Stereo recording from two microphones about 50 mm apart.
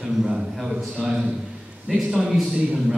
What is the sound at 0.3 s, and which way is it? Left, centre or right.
Speech, centre.